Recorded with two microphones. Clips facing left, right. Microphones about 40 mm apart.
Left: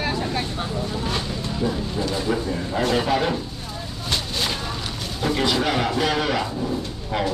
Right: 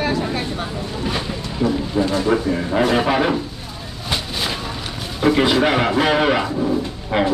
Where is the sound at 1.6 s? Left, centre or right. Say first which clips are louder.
Right 7 dB; right.